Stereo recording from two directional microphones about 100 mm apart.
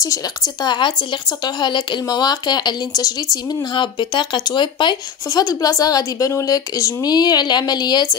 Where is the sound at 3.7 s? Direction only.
55° left (ahead or behind).